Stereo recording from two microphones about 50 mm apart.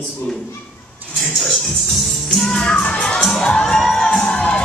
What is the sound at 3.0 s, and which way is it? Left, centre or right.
Children shouting, centre.